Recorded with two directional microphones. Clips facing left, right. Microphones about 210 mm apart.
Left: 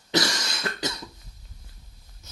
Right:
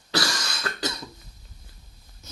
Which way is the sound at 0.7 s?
20° left (ahead or behind).